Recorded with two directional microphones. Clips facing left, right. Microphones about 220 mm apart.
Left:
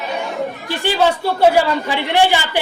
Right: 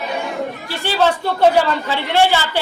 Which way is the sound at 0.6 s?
15° left (ahead or behind).